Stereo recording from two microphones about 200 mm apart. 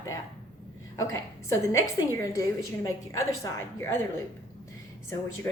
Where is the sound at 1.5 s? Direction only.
15° left (ahead or behind).